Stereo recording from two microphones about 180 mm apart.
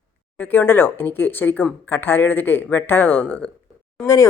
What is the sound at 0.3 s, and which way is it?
Speech, 10° left (ahead or behind).